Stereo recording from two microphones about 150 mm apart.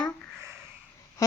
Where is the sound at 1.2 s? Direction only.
20° left (ahead or behind).